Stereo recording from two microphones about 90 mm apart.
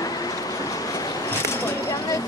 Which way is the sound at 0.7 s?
40° left (ahead or behind).